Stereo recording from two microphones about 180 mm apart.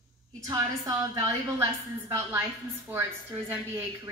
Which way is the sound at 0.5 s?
20° right (ahead or behind).